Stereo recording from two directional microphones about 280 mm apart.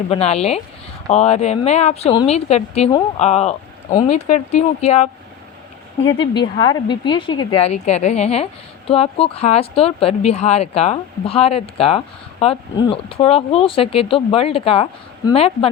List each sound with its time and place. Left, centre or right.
0.1 s speech: left
6.1 s a woman's voice: centre